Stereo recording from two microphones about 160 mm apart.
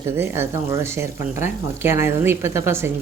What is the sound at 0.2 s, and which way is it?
Speech, 15° right (ahead or behind).